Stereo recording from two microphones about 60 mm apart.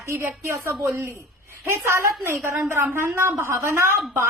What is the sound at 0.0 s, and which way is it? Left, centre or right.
A woman's voice, right.